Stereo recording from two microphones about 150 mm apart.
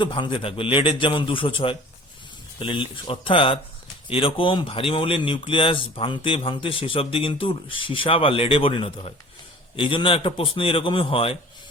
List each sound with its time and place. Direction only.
0.0 s speech: 35° left (ahead or behind)